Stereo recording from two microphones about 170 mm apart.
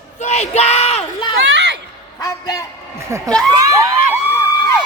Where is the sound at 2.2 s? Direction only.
20° left (ahead or behind).